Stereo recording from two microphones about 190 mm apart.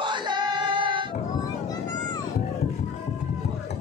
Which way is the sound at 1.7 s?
20° left (ahead or behind).